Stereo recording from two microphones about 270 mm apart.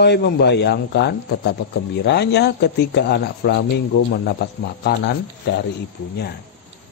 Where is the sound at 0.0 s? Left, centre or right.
Left.